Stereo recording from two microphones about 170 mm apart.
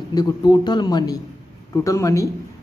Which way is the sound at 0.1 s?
25° left (ahead or behind).